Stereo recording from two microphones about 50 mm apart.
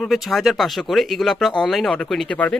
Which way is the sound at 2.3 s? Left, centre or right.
Left.